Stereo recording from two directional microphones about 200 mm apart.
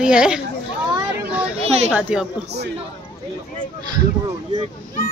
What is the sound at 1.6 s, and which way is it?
Children playing, 30° right (ahead or behind).